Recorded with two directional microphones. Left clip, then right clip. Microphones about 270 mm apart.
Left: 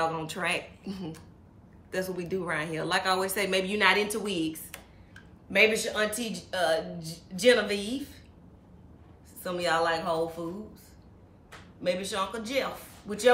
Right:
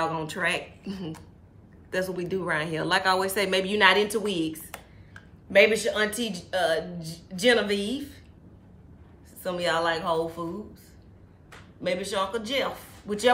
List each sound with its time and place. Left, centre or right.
0.0 s speech: centre
4.6 s a sound: right
5.5 s speech: centre
9.4 s speech: centre
11.8 s speech: centre